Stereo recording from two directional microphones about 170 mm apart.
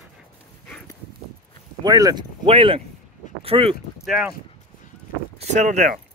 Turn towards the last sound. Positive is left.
turn(degrees=-45)  # may be behind; listen again after turning